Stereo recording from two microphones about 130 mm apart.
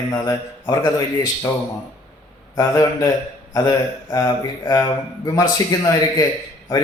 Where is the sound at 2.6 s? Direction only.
25° left (ahead or behind).